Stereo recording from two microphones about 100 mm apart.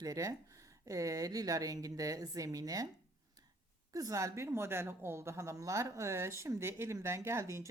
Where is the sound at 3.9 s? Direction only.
35° right (ahead or behind).